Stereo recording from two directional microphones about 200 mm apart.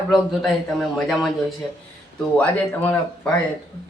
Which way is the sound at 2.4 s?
5° left (ahead or behind).